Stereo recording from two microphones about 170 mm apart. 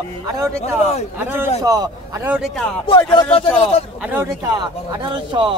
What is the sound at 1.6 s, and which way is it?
Music, 20° right (ahead or behind).